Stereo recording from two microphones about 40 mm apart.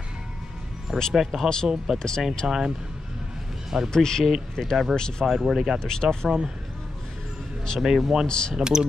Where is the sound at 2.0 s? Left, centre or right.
Centre.